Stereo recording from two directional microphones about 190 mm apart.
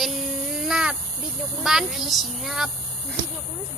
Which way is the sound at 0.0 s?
Centre (ahead or behind).